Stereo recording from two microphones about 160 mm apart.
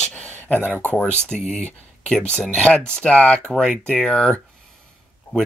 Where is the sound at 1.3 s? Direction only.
45° left (ahead or behind).